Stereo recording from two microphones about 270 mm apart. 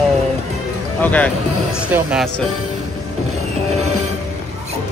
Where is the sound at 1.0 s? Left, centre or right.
Centre.